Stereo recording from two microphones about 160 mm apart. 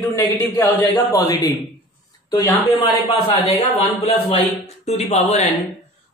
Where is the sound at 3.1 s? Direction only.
35° left (ahead or behind).